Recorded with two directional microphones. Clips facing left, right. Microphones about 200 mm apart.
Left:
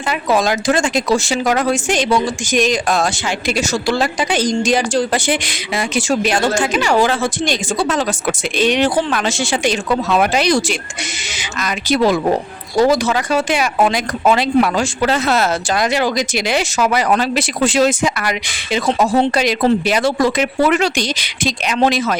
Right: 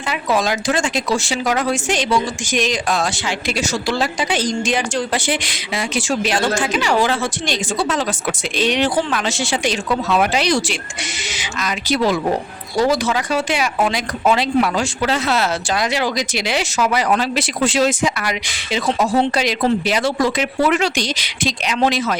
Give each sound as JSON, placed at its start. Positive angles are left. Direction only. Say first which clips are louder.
{"t": 0.1, "sound": "speech", "louder": "left 3 dB", "side_deg": 45}